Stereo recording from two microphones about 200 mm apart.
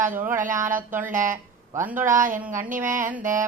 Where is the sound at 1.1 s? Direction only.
40° right (ahead or behind).